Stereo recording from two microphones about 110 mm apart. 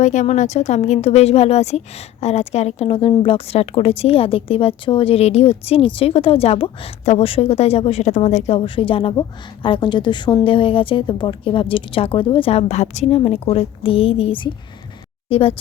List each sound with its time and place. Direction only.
0.0 s a woman's voice: 90° left; by 15.5 s 60° left (ahead or behind)